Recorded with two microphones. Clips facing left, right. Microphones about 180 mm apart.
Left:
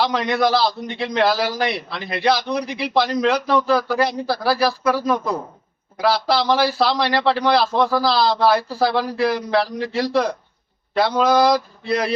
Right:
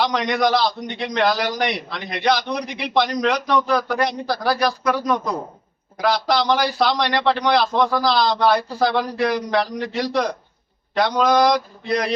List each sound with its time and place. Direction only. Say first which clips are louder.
0.3 s a man's voice: left 1 dB; 5° left (ahead or behind)
9.7 s a man's voice: left 1 dB; 30° left (ahead or behind)
10.0 s a man's voice: left 2 dB; 5° left (ahead or behind)